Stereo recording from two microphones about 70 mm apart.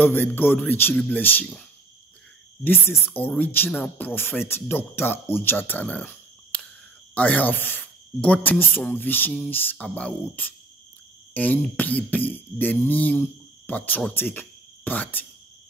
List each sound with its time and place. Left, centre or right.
0.0 s speech: left
2.6 s speech: left
7.2 s speech: left
9.8 s speech: centre